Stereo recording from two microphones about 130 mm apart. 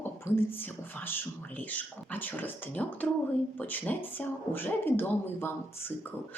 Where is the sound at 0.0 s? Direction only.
15° left (ahead or behind).